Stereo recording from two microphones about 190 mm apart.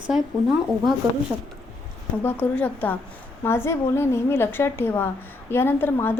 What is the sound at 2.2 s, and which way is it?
A woman's voice, 10° left (ahead or behind).